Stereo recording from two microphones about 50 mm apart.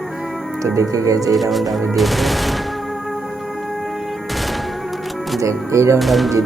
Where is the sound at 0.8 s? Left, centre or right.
Right.